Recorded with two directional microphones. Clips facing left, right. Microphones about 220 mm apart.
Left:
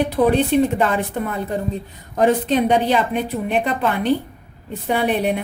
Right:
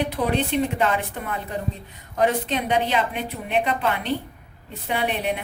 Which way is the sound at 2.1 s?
40° left (ahead or behind).